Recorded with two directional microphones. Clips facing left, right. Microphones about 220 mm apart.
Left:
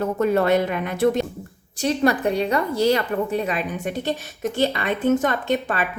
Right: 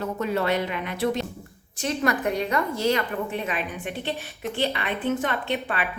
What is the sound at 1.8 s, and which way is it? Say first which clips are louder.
A woman's voice: left 5 dB; 30° left (ahead or behind).